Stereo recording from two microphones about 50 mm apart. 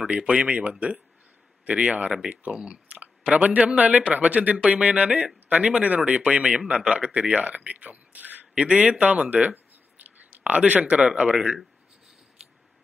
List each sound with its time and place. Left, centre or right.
0.4 s speech: right